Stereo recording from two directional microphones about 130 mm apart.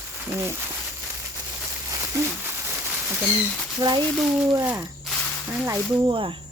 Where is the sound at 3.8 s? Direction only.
30° right (ahead or behind).